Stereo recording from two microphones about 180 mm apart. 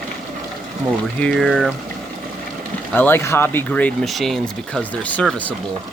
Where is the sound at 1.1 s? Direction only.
5° left (ahead or behind).